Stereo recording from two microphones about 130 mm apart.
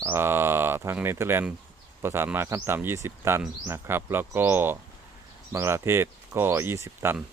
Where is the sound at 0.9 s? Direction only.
20° right (ahead or behind).